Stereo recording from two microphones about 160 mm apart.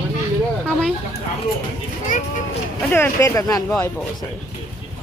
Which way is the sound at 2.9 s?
15° left (ahead or behind).